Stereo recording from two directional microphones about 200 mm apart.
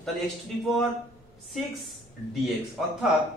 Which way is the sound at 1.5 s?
Centre (ahead or behind).